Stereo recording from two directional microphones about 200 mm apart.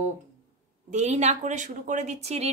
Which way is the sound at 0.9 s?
35° right (ahead or behind).